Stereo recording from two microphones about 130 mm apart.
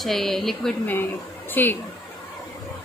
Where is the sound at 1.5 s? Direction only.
15° left (ahead or behind).